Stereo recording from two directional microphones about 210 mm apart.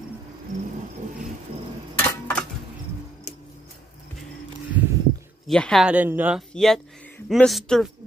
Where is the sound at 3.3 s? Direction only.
30° left (ahead or behind).